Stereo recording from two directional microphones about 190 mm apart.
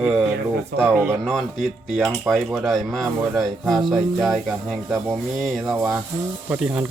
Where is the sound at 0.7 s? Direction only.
50° right (ahead or behind).